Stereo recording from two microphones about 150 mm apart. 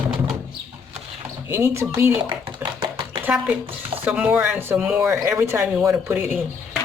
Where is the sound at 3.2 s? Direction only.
10° right (ahead or behind).